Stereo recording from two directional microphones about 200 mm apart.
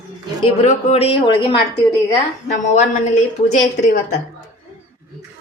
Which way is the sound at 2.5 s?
40° left (ahead or behind).